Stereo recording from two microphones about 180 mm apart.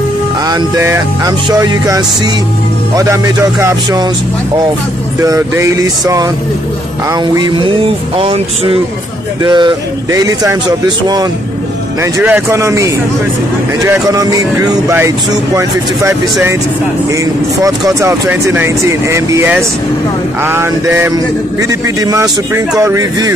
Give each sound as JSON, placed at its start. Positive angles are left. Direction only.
{"t": 0.5, "sound": "speech", "side_deg": -20}
{"t": 5.2, "sound": "speech", "side_deg": -15}
{"t": 7.3, "sound": "speech", "side_deg": -25}
{"t": 12.0, "sound": "speech", "side_deg": -15}
{"t": 17.6, "sound": "speech", "side_deg": -15}